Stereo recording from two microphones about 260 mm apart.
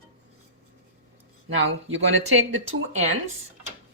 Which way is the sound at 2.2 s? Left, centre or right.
Right.